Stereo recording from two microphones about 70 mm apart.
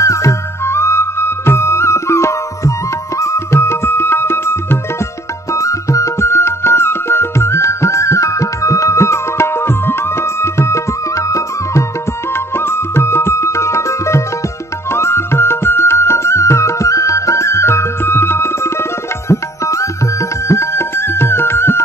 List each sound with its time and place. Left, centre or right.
0.0 s music: left
5.5 s music: left
12.5 s music: left